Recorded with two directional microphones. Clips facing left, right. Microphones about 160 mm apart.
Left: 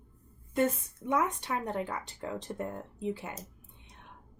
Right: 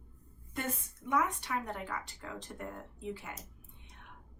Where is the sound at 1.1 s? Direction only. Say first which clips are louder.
Left 3 dB; 25° left (ahead or behind).